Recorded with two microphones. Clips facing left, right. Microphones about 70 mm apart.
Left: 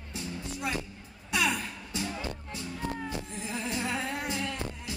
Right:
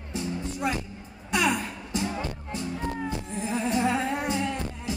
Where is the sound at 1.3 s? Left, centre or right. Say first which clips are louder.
Right 4 dB; centre.